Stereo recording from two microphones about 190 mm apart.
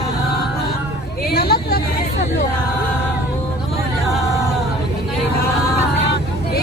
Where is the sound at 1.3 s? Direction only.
55° left (ahead or behind).